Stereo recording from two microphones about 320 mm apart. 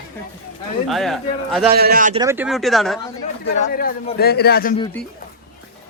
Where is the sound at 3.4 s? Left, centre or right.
Left.